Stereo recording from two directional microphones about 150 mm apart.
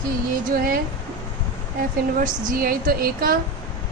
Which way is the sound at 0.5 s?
70° right (ahead or behind).